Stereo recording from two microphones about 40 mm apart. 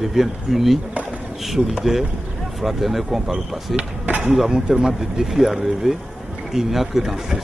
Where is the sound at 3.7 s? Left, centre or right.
Right.